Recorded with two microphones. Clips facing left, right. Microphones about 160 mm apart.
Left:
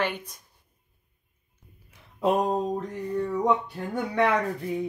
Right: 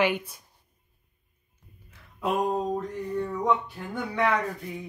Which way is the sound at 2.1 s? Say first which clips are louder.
Left 4 dB; 35° left (ahead or behind).